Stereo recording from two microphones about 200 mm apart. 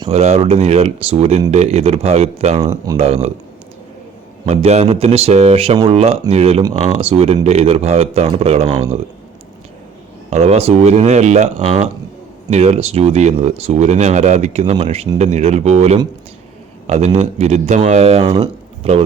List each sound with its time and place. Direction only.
0.1 s speech: 30° right (ahead or behind)
2.6 s speech: 20° right (ahead or behind)
3.0 s speech: 30° right (ahead or behind)
4.4 s speech: 35° right (ahead or behind)
10.2 s speech: 30° right (ahead or behind)